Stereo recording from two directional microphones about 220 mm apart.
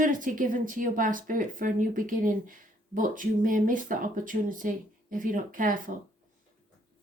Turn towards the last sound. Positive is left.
turn(degrees=-40)  # may be behind; listen again after turning